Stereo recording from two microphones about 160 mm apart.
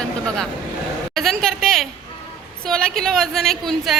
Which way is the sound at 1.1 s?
Centre (ahead or behind).